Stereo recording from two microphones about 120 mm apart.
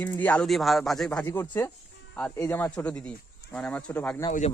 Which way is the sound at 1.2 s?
20° left (ahead or behind).